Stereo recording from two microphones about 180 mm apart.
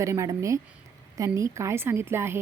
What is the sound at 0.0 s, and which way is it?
A woman's voice, 15° right (ahead or behind).